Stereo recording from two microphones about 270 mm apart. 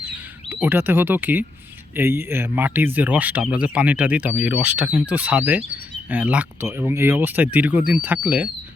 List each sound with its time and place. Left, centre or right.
0.5 s speech: centre